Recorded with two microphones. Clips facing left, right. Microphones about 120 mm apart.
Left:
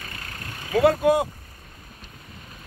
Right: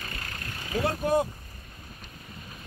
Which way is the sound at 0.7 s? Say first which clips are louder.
Left 8 dB; 80° left.